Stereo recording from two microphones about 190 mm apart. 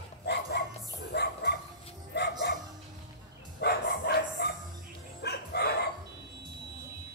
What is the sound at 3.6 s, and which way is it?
Dog, 55° left (ahead or behind).